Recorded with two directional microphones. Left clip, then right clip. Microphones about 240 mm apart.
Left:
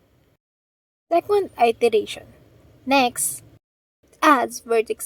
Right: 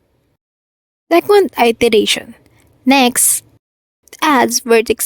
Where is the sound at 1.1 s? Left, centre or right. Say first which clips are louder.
Right 9 dB; right.